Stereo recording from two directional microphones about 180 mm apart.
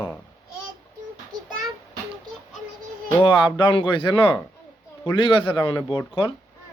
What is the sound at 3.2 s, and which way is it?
Speech, 25° left (ahead or behind).